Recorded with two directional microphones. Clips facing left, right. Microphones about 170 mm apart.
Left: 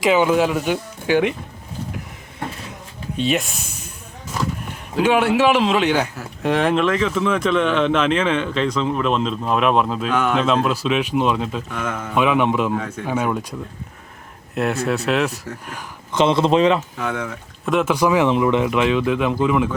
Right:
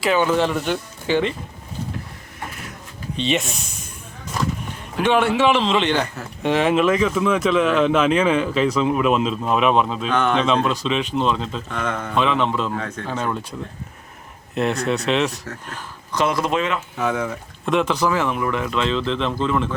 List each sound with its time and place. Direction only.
0.0 s speech: 15° left (ahead or behind)
3.2 s a man's voice: centre (ahead or behind)
5.0 s a man's voice: 5° left (ahead or behind)
16.1 s speech: 25° left (ahead or behind)
17.0 s speech: 5° right (ahead or behind)